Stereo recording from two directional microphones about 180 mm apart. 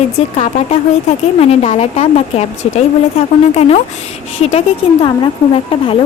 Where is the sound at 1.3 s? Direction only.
35° left (ahead or behind).